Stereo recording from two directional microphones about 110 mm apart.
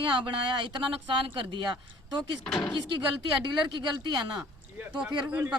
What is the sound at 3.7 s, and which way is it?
Speech, 45° right (ahead or behind).